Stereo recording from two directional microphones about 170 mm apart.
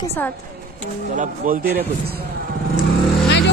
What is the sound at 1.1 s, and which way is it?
Speech, 50° right (ahead or behind).